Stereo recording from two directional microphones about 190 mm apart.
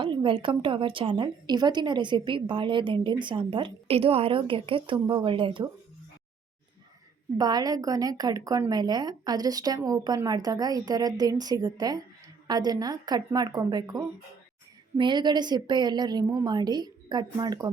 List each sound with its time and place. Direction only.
0.0 s a woman's voice: 25° right (ahead or behind)
7.3 s a woman's voice: 20° right (ahead or behind)